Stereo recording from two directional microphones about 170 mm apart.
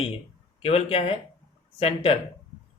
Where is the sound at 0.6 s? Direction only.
35° left (ahead or behind).